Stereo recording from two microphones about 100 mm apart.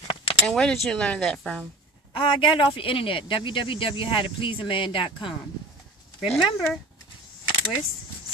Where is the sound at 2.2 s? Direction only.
60° left (ahead or behind).